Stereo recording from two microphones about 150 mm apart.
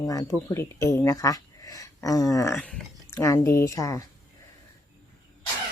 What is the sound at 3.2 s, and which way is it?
Speech, 20° left (ahead or behind).